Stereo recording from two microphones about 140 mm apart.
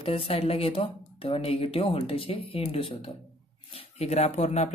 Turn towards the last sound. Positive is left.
turn(degrees=55)  # may be behind; listen again after turning